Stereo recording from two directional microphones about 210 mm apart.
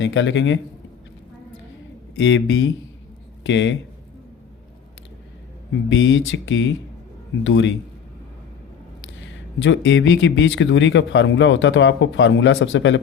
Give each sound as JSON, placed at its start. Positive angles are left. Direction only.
{"t": 0.0, "sound": "speech", "side_deg": 60}
{"t": 2.1, "sound": "speech", "side_deg": 60}
{"t": 5.9, "sound": "speech", "side_deg": 60}
{"t": 9.2, "sound": "speech", "side_deg": 60}